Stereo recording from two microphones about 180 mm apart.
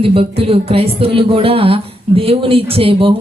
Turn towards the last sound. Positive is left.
turn(degrees=-30)  # may be behind; listen again after turning